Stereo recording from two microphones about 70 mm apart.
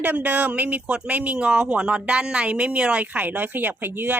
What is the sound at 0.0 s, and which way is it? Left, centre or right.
Speech, right.